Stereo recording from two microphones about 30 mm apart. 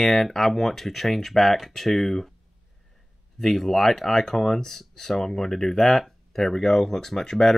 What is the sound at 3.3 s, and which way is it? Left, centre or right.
Speech, centre.